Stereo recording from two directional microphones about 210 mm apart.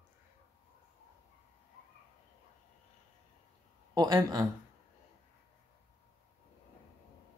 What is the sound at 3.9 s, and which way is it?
Speech, 20° right (ahead or behind).